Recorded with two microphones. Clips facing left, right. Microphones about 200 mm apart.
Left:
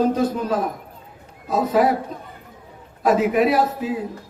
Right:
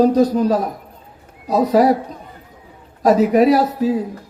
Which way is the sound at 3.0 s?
40° right (ahead or behind).